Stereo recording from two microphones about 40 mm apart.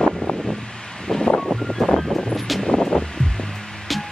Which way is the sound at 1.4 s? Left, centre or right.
Centre.